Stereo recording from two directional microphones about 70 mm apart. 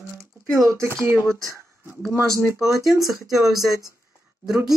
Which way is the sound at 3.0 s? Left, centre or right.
Centre.